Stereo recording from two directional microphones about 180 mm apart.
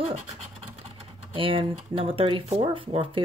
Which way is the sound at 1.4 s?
30° right (ahead or behind).